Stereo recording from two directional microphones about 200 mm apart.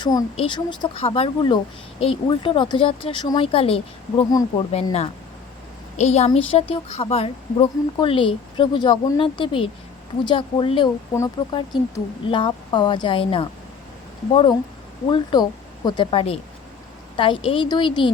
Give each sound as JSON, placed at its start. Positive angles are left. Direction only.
{"t": 0.0, "sound": "speech", "side_deg": 20}
{"t": 15.1, "sound": "speech", "side_deg": 20}